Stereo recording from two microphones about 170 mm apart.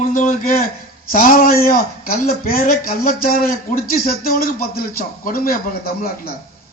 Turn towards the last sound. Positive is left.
turn(degrees=60)  # may be behind; listen again after turning